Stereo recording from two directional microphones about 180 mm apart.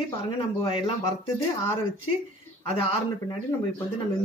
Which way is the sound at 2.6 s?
30° left (ahead or behind).